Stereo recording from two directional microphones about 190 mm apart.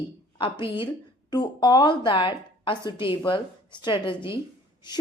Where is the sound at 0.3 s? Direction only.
25° left (ahead or behind).